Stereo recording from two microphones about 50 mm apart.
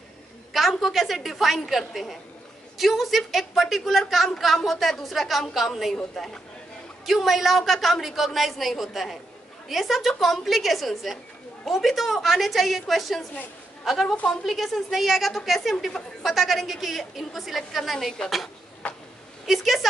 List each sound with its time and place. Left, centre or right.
0.5 s a woman's voice: centre
18.8 s speech: left
19.4 s a woman's voice: centre